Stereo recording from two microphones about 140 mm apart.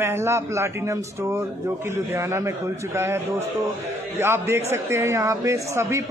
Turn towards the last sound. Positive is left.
turn(degrees=-20)  # may be behind; listen again after turning